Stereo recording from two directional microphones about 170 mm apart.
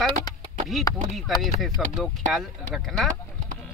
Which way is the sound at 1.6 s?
Centre (ahead or behind).